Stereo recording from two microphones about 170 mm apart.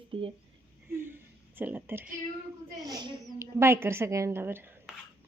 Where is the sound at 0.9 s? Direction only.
15° right (ahead or behind).